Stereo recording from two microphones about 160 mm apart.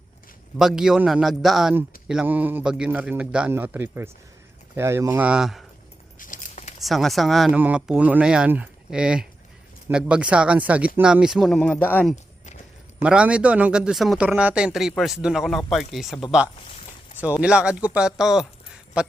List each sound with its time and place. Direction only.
0.6 s a man's voice: 5° right (ahead or behind)
6.1 s a sound: 55° left (ahead or behind)
6.7 s a man's voice: centre (ahead or behind)
13.0 s speech: 5° right (ahead or behind)